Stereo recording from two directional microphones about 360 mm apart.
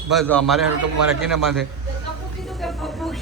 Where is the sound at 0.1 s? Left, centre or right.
Centre.